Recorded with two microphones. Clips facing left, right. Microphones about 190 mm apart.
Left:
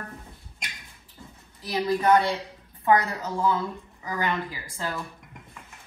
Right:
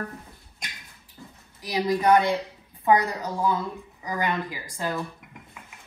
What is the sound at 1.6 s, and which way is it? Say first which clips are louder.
Speech: right 1 dB; 15° right (ahead or behind).